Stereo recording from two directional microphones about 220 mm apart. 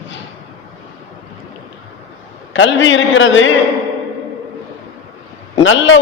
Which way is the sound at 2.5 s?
55° left (ahead or behind).